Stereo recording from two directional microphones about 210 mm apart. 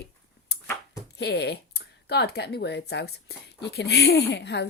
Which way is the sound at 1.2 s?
50° left (ahead or behind).